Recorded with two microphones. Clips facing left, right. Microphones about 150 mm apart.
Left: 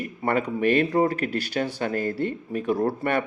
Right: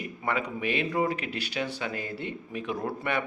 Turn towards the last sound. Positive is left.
turn(degrees=40)  # may be behind; listen again after turning